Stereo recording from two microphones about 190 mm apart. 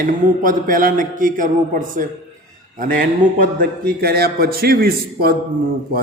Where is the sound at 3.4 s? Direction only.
55° right (ahead or behind).